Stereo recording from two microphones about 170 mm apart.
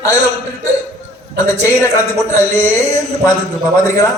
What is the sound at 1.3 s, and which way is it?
Speech, 15° left (ahead or behind).